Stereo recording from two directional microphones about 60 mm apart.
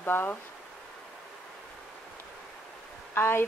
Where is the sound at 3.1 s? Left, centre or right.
Left.